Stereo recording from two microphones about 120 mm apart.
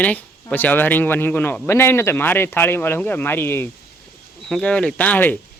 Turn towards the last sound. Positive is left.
turn(degrees=15)  # may be behind; listen again after turning